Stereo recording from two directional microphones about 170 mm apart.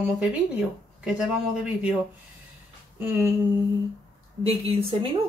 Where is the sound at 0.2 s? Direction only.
5° right (ahead or behind).